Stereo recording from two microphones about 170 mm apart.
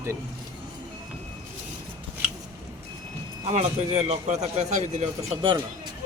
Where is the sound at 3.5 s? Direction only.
40° right (ahead or behind).